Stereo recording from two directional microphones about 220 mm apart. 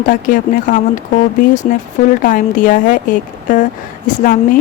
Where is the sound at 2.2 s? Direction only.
40° left (ahead or behind).